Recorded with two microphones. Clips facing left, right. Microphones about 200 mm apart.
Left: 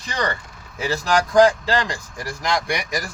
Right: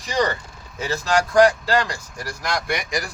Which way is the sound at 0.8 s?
15° left (ahead or behind).